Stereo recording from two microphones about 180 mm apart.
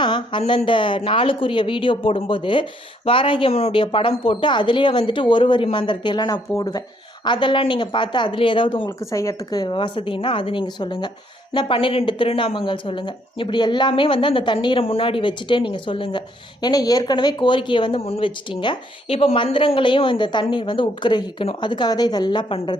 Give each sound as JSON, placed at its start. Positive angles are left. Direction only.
{"t": 0.0, "sound": "speech", "side_deg": 25}